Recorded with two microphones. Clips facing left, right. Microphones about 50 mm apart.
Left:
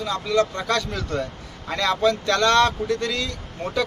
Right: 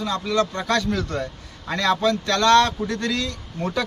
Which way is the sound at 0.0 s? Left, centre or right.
Centre.